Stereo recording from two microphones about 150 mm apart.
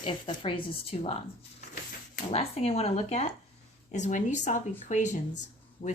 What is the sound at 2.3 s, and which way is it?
Speech, 45° left (ahead or behind).